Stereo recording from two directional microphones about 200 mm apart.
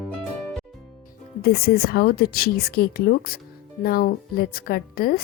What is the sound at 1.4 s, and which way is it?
A woman's voice, 50° left (ahead or behind).